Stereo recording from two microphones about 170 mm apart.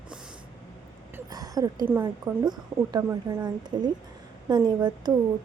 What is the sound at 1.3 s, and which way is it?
A woman's voice, 20° right (ahead or behind).